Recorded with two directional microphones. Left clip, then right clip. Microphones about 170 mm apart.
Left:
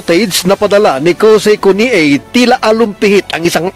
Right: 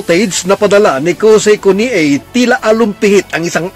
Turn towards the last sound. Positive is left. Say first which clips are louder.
# left 1 dB
turn(degrees=30)  # may be behind; listen again after turning